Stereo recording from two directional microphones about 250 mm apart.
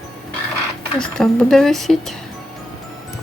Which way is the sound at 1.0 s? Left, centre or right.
Centre.